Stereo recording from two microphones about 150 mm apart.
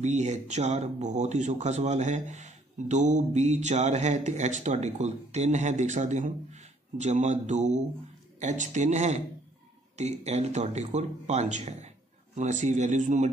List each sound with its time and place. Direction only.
0.0 s speech: 50° right (ahead or behind)